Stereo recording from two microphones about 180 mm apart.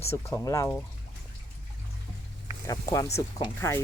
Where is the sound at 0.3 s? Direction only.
15° left (ahead or behind).